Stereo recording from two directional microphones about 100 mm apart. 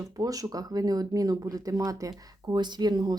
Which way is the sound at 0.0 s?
35° right (ahead or behind).